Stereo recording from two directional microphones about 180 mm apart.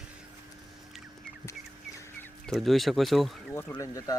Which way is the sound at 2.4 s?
Centre (ahead or behind).